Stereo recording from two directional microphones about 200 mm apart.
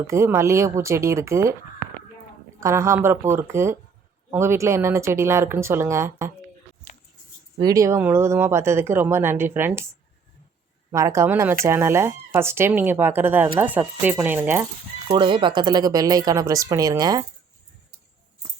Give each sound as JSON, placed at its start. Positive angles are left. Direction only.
{"t": 0.1, "sound": "speech", "side_deg": -15}
{"t": 2.6, "sound": "speech", "side_deg": -15}
{"t": 7.6, "sound": "speech", "side_deg": -15}
{"t": 10.9, "sound": "speech", "side_deg": -15}
{"t": 15.1, "sound": "speech", "side_deg": -25}